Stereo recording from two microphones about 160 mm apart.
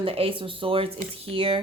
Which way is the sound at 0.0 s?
35° right (ahead or behind).